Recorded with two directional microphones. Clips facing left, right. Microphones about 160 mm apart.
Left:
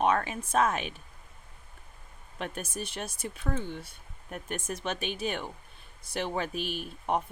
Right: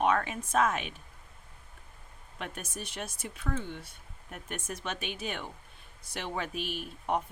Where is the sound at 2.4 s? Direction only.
30° left (ahead or behind).